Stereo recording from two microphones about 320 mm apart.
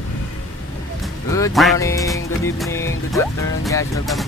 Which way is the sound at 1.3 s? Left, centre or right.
Centre.